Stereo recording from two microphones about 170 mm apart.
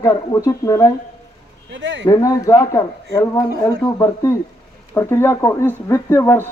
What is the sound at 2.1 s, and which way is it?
Speech, 20° left (ahead or behind).